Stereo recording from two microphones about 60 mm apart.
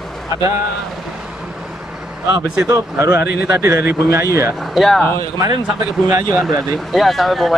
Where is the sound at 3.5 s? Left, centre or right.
Right.